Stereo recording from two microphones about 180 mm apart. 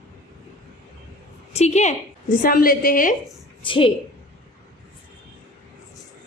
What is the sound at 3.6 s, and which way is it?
Speech, 30° left (ahead or behind).